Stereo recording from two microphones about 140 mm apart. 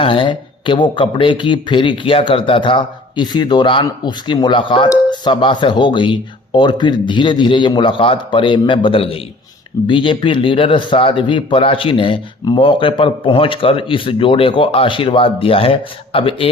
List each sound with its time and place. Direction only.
0.0 s speech: 35° left (ahead or behind)